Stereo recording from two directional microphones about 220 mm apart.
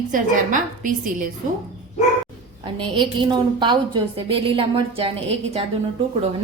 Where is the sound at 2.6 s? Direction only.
20° right (ahead or behind).